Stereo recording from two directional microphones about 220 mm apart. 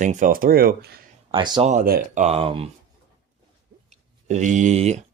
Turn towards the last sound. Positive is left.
turn(degrees=-30)  # may be behind; listen again after turning